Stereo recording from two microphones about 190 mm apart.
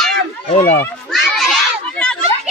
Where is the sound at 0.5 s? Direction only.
35° left (ahead or behind).